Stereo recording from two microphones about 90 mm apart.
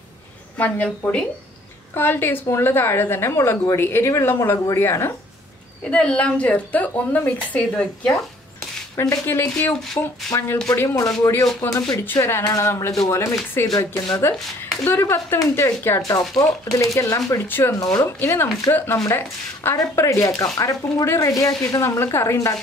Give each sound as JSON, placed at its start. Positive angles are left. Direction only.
{"t": 0.6, "sound": "a woman's voice", "side_deg": 15}
{"t": 5.9, "sound": "a woman's voice", "side_deg": 15}
{"t": 9.2, "sound": "a woman's voice", "side_deg": 25}
{"t": 12.0, "sound": "speech", "side_deg": 25}
{"t": 13.7, "sound": "speech", "side_deg": 45}
{"t": 14.9, "sound": "a woman's voice", "side_deg": 30}
{"t": 16.1, "sound": "speech", "side_deg": 40}
{"t": 17.5, "sound": "a woman's voice", "side_deg": 25}
{"t": 17.7, "sound": "a woman's voice", "side_deg": 35}